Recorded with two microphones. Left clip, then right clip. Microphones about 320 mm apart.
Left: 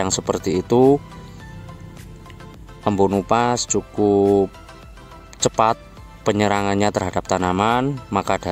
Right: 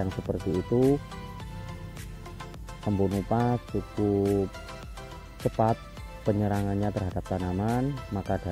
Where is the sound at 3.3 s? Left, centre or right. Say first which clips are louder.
Left 9 dB; left.